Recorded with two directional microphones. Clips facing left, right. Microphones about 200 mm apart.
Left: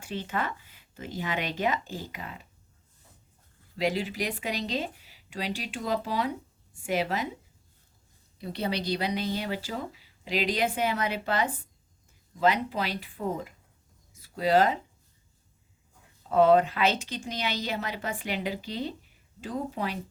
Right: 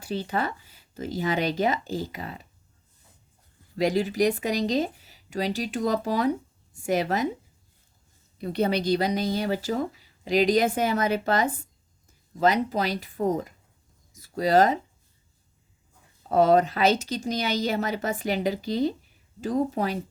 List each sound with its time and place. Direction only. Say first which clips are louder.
0.0 s a woman's voice: right 4 dB; 35° right (ahead or behind)
3.8 s a woman's voice: right 6 dB; 45° right (ahead or behind)
8.4 s a woman's voice: right 6 dB; 50° right (ahead or behind)
16.3 s a woman's voice: right 1 dB; 40° right (ahead or behind)